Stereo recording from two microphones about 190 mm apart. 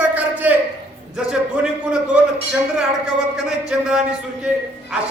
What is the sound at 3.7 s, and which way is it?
Speech, 5° right (ahead or behind).